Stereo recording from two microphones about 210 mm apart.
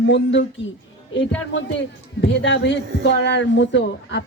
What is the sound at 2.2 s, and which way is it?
A man's voice, 60° left (ahead or behind).